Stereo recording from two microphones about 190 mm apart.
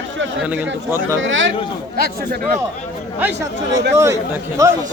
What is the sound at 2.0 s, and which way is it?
Speech, 55° right (ahead or behind).